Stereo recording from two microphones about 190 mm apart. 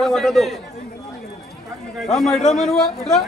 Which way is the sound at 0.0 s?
Centre (ahead or behind).